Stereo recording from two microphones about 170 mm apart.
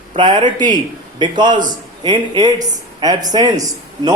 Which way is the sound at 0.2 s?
25° right (ahead or behind).